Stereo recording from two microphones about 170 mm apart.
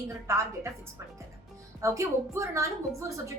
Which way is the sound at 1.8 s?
20° right (ahead or behind).